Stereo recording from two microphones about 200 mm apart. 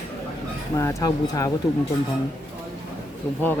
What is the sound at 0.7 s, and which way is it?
Speech, 15° left (ahead or behind).